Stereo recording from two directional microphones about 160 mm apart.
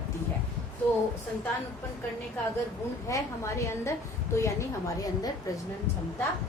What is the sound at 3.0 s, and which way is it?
A woman's voice, 20° left (ahead or behind).